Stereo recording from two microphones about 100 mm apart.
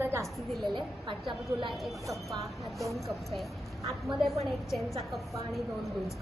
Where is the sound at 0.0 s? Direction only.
25° right (ahead or behind).